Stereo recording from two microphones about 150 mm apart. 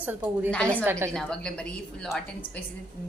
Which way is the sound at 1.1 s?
5° left (ahead or behind).